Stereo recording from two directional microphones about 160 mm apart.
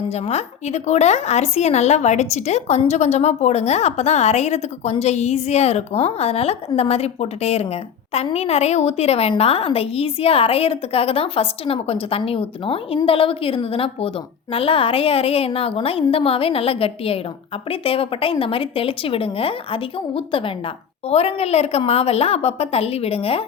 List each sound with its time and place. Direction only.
0.1 s a woman's voice: 40° left (ahead or behind)